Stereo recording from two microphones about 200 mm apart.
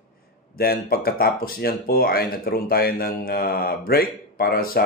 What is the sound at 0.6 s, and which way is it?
Speech, 50° left (ahead or behind).